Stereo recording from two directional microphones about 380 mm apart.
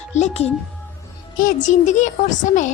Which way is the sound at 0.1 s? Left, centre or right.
Centre.